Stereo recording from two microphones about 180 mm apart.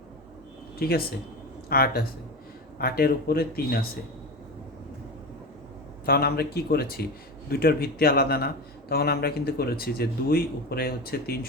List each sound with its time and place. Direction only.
0.8 s speech: 55° left (ahead or behind)
6.1 s speech: 60° left (ahead or behind)